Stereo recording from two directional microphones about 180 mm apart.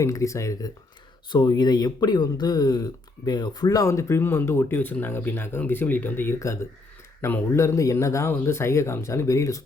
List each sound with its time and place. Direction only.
0.0 s speech: 15° left (ahead or behind)